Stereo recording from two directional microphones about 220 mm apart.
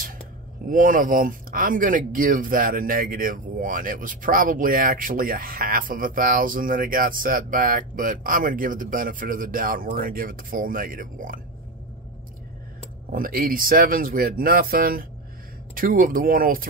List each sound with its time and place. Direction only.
0.7 s speech: 35° right (ahead or behind)
13.1 s speech: 40° right (ahead or behind)